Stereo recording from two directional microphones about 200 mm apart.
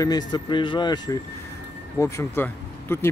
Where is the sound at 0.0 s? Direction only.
20° left (ahead or behind).